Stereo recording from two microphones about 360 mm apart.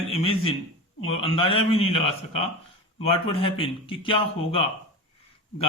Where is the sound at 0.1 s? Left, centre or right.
Centre.